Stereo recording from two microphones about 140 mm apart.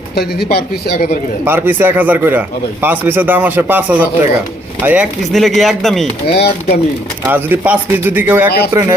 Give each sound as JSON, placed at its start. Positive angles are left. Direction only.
{"t": 0.2, "sound": "speech", "side_deg": 90}
{"t": 1.5, "sound": "speech", "side_deg": -15}
{"t": 5.3, "sound": "speech", "side_deg": 0}
{"t": 7.3, "sound": "speech", "side_deg": -15}